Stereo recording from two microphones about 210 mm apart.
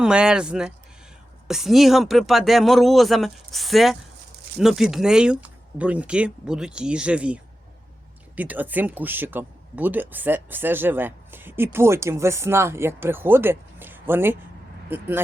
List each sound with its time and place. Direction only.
0.0 s speech: 5° right (ahead or behind)